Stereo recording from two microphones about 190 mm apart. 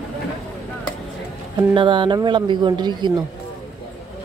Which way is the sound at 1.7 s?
25° right (ahead or behind).